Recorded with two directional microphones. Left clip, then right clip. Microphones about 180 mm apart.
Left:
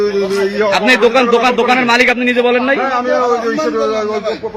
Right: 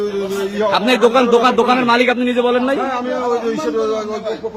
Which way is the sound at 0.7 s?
20° right (ahead or behind).